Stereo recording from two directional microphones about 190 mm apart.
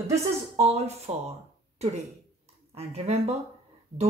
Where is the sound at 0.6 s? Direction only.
35° right (ahead or behind).